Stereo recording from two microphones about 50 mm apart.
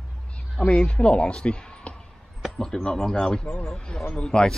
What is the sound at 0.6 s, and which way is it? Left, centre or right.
A man's voice, left.